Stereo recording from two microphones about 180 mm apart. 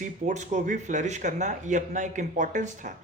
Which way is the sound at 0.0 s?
45° right (ahead or behind).